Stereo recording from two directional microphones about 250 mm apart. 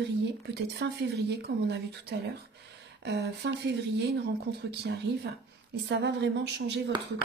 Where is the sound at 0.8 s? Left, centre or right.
Right.